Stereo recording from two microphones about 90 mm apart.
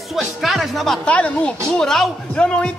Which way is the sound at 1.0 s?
10° left (ahead or behind).